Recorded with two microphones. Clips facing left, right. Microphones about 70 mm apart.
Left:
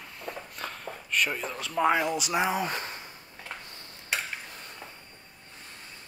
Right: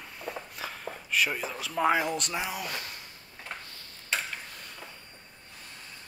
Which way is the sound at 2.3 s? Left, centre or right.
Left.